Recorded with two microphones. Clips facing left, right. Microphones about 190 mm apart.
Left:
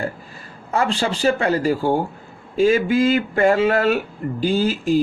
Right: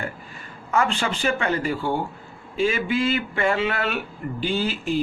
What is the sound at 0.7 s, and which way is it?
Speech, 35° left (ahead or behind).